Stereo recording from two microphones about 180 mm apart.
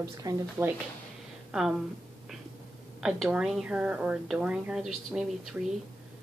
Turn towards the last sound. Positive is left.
turn(degrees=-5)  # may be behind; listen again after turning